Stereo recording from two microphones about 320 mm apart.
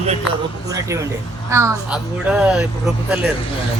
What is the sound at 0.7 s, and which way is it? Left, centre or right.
A woman's voice, centre.